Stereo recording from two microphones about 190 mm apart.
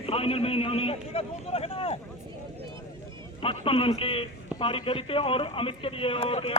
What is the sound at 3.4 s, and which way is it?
A man's voice, 30° left (ahead or behind).